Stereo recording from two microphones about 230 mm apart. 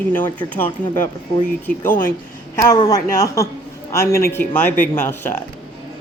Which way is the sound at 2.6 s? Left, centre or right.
Centre.